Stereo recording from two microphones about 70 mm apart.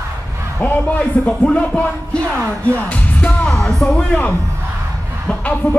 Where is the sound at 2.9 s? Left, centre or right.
Centre.